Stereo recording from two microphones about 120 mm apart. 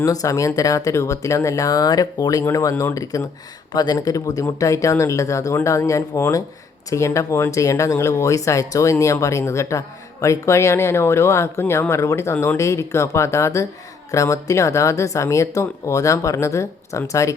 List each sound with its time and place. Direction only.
0.0 s speech: 30° left (ahead or behind)